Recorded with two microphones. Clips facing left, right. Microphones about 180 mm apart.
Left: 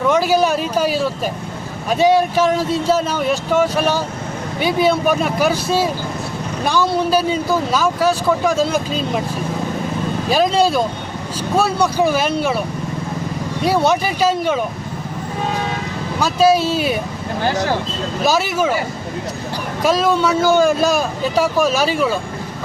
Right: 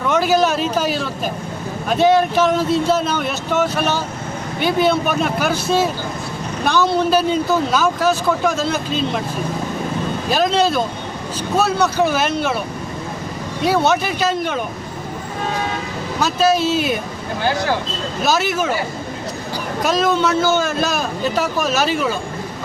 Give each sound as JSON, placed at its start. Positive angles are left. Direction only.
{"t": 0.1, "sound": "speech", "side_deg": 10}
{"t": 10.2, "sound": "speech", "side_deg": 5}
{"t": 13.7, "sound": "speech", "side_deg": 10}
{"t": 16.2, "sound": "speech", "side_deg": 10}
{"t": 18.3, "sound": "speech", "side_deg": 10}
{"t": 19.8, "sound": "speech", "side_deg": 5}